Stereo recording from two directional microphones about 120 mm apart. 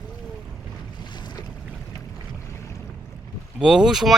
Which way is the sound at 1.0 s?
40° left (ahead or behind).